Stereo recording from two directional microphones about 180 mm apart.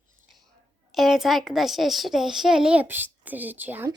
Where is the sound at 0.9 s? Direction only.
Centre (ahead or behind).